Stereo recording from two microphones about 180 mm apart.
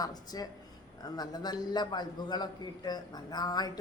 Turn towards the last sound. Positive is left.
turn(degrees=20)  # may be behind; listen again after turning